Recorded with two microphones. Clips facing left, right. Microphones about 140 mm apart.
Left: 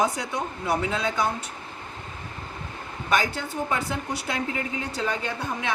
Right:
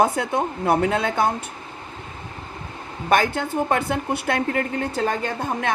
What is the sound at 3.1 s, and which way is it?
A woman's voice, 60° right (ahead or behind).